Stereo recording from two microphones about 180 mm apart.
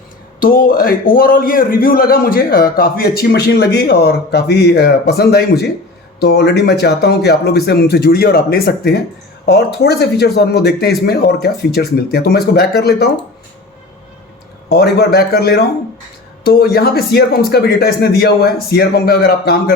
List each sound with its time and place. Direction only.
0.3 s a man's voice: 50° left (ahead or behind)
14.7 s a man's voice: 65° left (ahead or behind)